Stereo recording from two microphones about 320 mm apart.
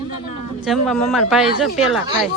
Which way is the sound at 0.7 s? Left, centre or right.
Centre.